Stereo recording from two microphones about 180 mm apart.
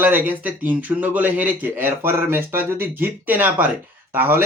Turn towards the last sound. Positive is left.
turn(degrees=-10)  # may be behind; listen again after turning